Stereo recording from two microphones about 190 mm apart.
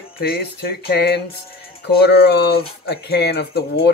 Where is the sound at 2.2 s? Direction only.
55° left (ahead or behind).